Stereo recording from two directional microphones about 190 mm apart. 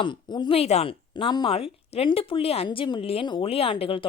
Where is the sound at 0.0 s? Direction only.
25° left (ahead or behind).